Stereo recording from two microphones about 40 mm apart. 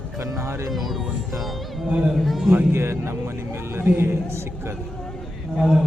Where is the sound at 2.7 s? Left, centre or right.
Right.